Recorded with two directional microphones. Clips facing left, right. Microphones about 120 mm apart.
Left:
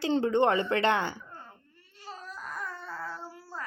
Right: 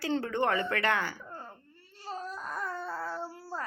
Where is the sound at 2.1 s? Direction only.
25° right (ahead or behind).